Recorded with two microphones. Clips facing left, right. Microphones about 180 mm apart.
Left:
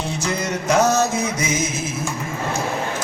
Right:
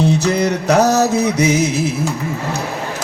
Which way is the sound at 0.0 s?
65° right (ahead or behind).